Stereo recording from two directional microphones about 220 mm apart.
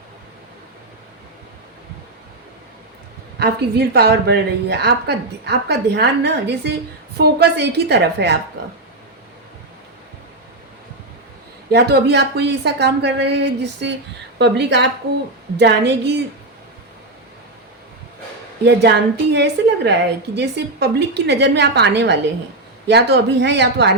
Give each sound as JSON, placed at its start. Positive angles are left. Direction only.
{"t": 3.3, "sound": "a woman's voice", "side_deg": -45}
{"t": 11.7, "sound": "a woman's voice", "side_deg": -50}
{"t": 19.3, "sound": "a woman's voice", "side_deg": -50}